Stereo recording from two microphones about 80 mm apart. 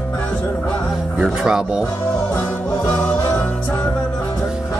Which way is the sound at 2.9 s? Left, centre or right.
Centre.